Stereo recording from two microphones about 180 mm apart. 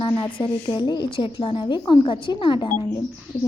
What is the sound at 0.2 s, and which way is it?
A woman's voice, 30° left (ahead or behind).